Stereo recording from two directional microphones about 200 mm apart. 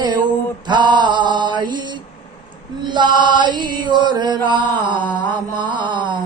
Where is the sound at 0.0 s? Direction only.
20° right (ahead or behind).